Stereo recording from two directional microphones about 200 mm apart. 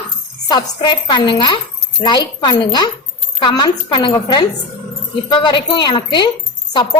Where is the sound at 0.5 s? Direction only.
20° left (ahead or behind).